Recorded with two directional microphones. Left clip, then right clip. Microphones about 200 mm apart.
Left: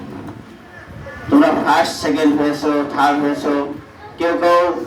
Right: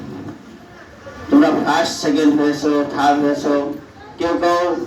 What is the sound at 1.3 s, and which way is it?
Speech, 35° left (ahead or behind).